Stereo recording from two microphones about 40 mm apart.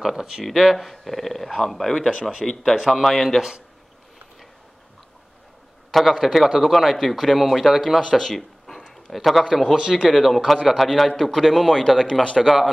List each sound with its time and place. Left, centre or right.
0.0 s a man's voice: centre
2.7 s a man's voice: centre
5.9 s a man's voice: centre
8.0 s a man's voice: centre
9.8 s speech: centre
10.0 s a man's voice: centre
12.4 s speech: centre